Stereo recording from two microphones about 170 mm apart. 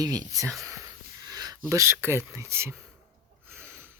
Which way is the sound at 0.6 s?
20° right (ahead or behind).